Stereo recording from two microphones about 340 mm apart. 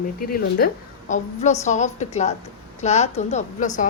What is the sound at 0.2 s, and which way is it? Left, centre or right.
Speech, left.